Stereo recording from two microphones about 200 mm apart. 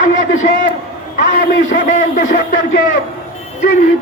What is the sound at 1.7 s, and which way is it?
Speech, 40° left (ahead or behind).